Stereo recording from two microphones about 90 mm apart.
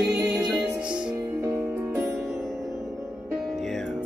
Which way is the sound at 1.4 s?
30° right (ahead or behind).